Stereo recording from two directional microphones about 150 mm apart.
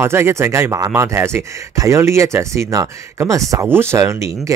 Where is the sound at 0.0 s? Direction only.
15° right (ahead or behind).